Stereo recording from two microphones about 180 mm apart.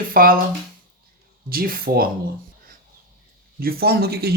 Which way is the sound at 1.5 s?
55° right (ahead or behind).